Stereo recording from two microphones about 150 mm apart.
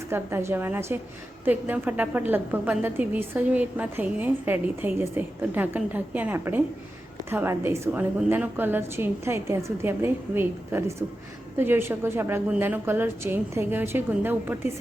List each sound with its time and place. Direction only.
0.1 s a woman's voice: 15° right (ahead or behind)